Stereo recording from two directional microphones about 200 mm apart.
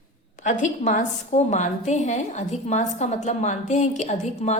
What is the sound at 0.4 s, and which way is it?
A woman's voice, 40° left (ahead or behind).